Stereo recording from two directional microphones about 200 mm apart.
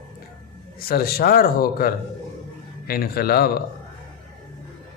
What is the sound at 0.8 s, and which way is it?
A man's voice, 50° left (ahead or behind).